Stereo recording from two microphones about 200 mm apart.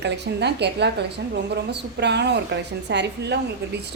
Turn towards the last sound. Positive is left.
turn(degrees=-60)  # may be behind; listen again after turning